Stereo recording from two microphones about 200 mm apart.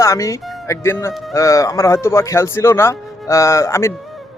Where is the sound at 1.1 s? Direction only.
Centre (ahead or behind).